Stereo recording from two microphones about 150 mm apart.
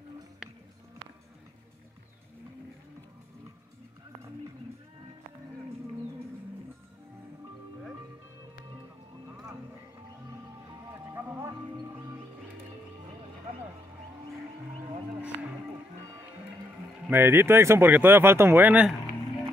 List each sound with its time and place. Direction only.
10.9 s music: 15° right (ahead or behind)
17.1 s speech: 15° right (ahead or behind)